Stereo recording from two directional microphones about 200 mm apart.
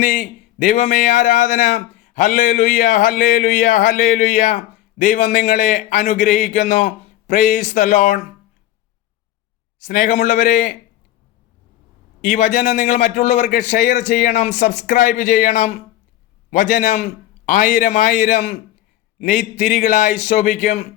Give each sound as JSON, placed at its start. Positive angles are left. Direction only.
{"t": 0.0, "sound": "speech", "side_deg": 40}
{"t": 9.8, "sound": "speech", "side_deg": 40}
{"t": 12.2, "sound": "speech", "side_deg": 40}